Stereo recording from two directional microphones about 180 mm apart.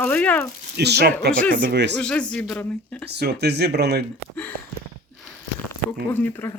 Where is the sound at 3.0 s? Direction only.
65° right (ahead or behind).